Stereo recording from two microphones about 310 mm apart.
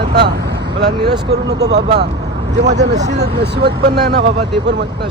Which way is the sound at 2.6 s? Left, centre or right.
Right.